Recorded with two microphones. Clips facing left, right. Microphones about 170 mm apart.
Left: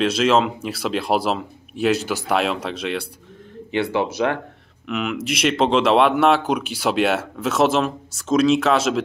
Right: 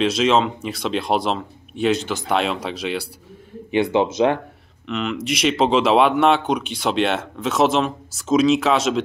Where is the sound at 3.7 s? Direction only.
20° right (ahead or behind).